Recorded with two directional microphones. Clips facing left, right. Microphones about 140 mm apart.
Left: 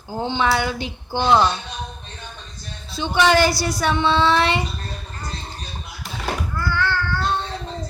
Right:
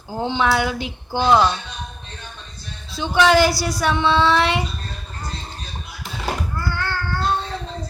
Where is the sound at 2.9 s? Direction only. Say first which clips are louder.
Right 1 dB; 5° right (ahead or behind).